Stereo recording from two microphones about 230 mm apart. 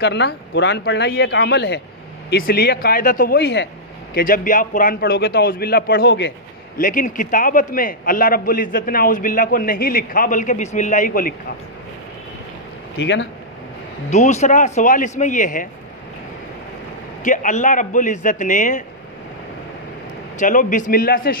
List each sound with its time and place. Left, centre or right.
0.0 s a man's voice: left
6.8 s a man's voice: left
13.0 s speech: left
14.1 s a man's voice: left
17.2 s a man's voice: left
20.3 s a man's voice: left